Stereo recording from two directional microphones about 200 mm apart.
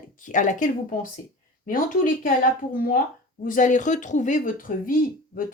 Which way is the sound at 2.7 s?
45° left (ahead or behind).